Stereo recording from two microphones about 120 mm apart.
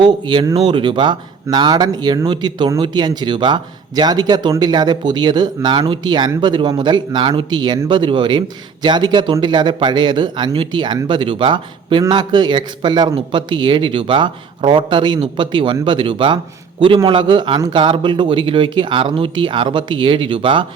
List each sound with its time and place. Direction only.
0.0 s speech: 40° right (ahead or behind)